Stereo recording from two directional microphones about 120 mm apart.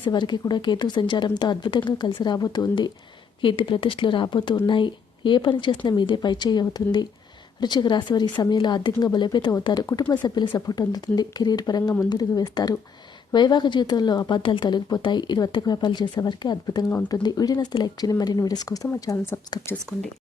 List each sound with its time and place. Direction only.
0.1 s a woman's voice: 40° left (ahead or behind)
3.4 s a woman's voice: 50° left (ahead or behind)